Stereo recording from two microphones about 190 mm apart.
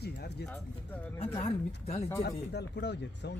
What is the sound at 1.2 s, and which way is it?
Speech, 30° left (ahead or behind).